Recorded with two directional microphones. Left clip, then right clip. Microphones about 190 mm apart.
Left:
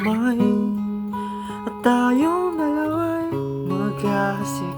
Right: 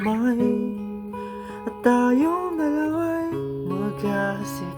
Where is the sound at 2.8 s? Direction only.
10° left (ahead or behind).